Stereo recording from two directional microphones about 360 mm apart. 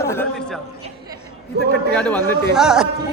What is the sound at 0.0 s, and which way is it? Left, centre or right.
Speech, centre.